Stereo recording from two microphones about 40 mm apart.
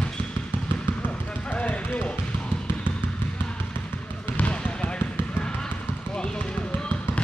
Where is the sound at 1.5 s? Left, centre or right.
Left.